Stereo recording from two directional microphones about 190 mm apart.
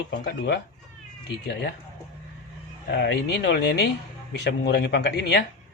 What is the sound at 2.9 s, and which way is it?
Speech, 60° left (ahead or behind).